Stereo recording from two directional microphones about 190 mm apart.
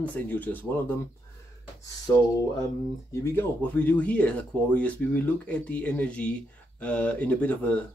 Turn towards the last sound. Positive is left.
turn(degrees=5)  # may be behind; listen again after turning